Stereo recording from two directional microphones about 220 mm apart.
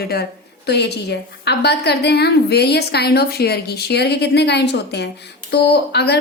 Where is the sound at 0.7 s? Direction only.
50° left (ahead or behind).